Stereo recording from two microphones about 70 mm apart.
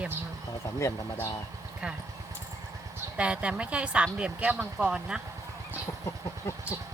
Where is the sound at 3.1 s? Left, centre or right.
Centre.